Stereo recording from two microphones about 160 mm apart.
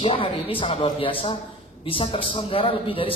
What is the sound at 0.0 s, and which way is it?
Speech, 35° left (ahead or behind).